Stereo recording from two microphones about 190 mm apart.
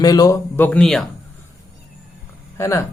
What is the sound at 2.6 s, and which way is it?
Speech, 15° left (ahead or behind).